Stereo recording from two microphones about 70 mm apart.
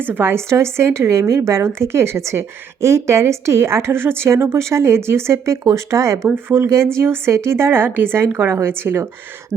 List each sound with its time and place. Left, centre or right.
0.0 s speech: right